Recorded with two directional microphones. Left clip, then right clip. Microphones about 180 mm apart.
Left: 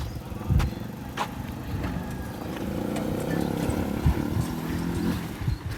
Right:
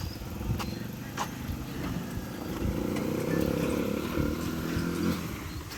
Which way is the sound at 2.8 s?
30° left (ahead or behind).